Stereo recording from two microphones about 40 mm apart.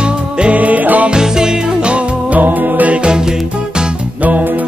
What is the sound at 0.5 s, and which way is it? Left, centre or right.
Music, right.